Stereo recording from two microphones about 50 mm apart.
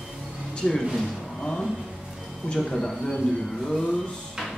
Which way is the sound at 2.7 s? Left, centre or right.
Centre.